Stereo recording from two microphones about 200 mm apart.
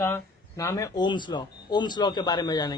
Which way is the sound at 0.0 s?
15° left (ahead or behind).